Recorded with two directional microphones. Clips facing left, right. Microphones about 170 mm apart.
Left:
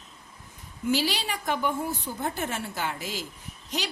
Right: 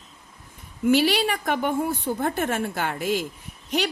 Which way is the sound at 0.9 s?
60° right (ahead or behind).